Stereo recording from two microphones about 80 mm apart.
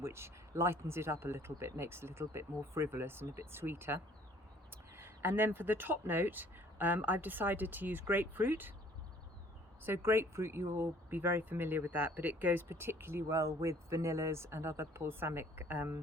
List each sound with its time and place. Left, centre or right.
0.0 s speech: right
9.8 s speech: right